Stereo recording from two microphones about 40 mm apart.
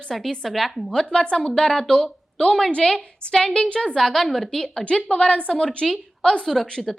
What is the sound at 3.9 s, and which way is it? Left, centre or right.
Speech, centre.